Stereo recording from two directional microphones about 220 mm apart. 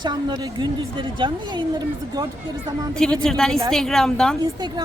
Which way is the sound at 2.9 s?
5° left (ahead or behind).